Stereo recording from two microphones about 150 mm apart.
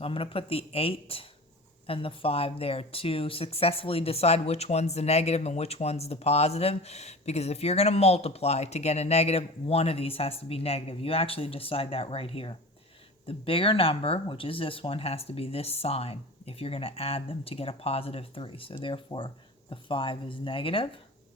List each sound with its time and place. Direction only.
0.0 s speech: 35° left (ahead or behind)